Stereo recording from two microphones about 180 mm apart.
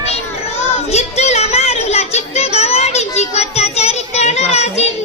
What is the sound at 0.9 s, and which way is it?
Child singing, 35° left (ahead or behind).